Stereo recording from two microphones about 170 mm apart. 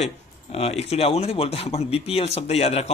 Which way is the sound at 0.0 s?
35° left (ahead or behind).